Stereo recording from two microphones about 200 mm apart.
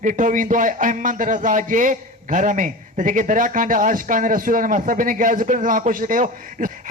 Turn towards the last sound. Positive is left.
turn(degrees=-40)  # may be behind; listen again after turning